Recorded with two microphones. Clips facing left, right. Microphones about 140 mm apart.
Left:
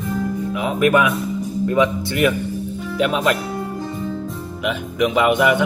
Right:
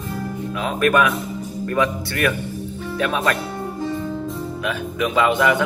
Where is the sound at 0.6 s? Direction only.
15° left (ahead or behind).